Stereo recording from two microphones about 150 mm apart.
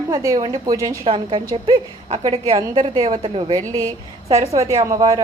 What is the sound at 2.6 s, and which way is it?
A woman's voice, 30° right (ahead or behind).